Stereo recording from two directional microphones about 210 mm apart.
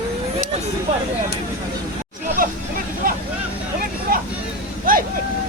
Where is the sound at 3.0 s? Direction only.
40° right (ahead or behind).